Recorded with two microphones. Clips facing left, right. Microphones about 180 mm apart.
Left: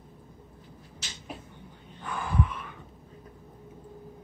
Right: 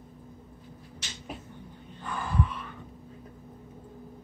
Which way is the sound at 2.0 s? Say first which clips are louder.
Left 1 dB; 15° left (ahead or behind).